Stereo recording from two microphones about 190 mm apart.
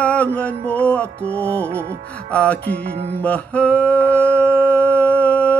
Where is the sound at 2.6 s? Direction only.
60° right (ahead or behind).